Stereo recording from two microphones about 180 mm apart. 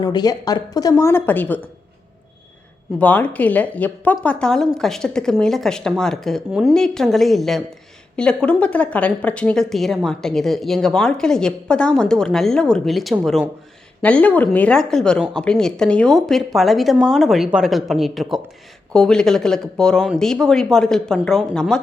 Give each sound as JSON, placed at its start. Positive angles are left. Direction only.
{"t": 0.0, "sound": "speech", "side_deg": 20}
{"t": 3.0, "sound": "a woman's voice", "side_deg": 10}